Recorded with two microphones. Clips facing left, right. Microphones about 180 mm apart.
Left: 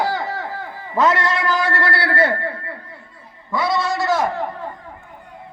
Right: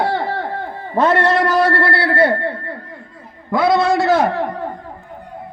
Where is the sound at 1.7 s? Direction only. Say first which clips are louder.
Right 5 dB; 60° right (ahead or behind).